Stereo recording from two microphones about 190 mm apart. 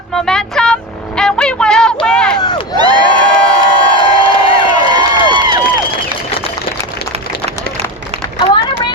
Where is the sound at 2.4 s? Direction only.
20° left (ahead or behind).